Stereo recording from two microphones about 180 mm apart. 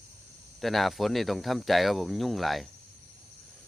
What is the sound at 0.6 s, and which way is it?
Speech, centre (ahead or behind).